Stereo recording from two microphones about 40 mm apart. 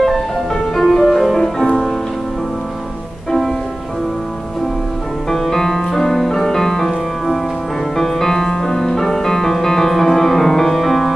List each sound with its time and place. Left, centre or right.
0.7 s music: centre
1.4 s music: centre
3.3 s music: centre
5.3 s music: centre